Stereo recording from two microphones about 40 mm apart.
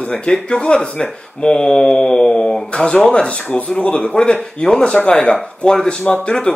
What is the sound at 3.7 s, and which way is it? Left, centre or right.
A man's voice, left.